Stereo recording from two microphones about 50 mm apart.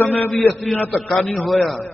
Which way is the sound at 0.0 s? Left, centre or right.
Left.